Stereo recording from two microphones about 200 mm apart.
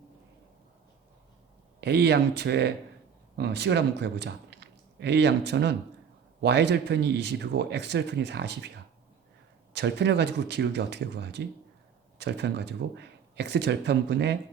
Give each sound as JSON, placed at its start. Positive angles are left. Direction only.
{"t": 1.8, "sound": "speech", "side_deg": -55}
{"t": 9.7, "sound": "speech", "side_deg": -60}